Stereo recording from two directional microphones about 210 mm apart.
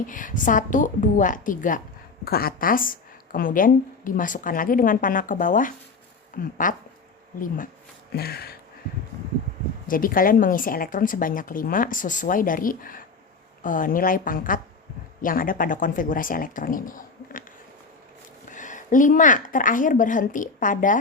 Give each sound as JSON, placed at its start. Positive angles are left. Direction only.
{"t": 0.1, "sound": "a woman's voice", "side_deg": 40}
{"t": 8.1, "sound": "a sound", "side_deg": 50}
{"t": 9.8, "sound": "a woman's voice", "side_deg": 40}
{"t": 18.5, "sound": "a woman's voice", "side_deg": 35}